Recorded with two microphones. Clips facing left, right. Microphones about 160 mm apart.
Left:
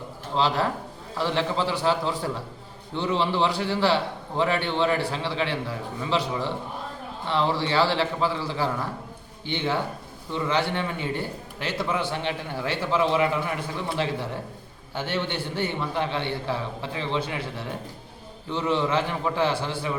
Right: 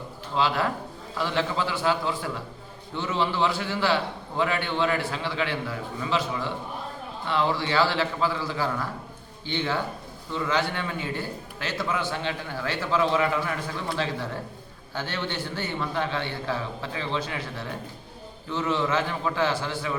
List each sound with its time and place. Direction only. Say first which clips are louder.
0.3 s a man's voice: left 1 dB; 35° left (ahead or behind)
18.7 s a man's voice: left 2 dB; 25° left (ahead or behind)